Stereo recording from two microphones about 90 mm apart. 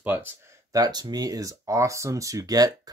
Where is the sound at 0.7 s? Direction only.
45° right (ahead or behind).